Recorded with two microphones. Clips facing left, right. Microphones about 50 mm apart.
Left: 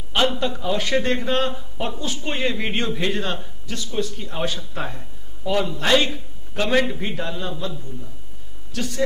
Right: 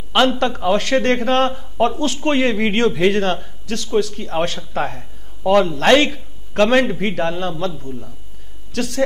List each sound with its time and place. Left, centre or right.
0.4 s a man's voice: right
6.5 s a man's voice: right